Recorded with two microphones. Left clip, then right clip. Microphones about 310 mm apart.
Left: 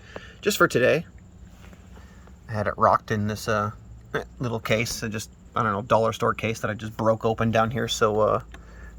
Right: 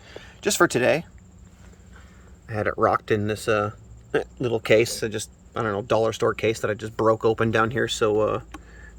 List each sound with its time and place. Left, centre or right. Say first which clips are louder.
0.2 s speech: even; centre
2.5 s speech: left 1 dB; centre